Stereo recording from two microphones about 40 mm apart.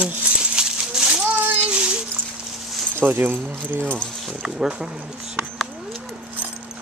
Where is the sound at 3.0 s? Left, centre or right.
Right.